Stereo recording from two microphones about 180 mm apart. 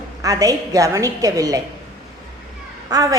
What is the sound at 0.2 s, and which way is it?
A woman's voice, 20° right (ahead or behind).